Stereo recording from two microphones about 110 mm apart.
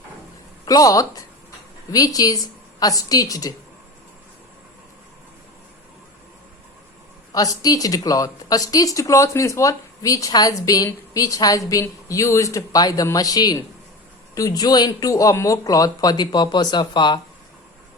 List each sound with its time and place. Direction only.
0.6 s a woman's voice: 35° left (ahead or behind)
7.3 s a woman's voice: 35° left (ahead or behind)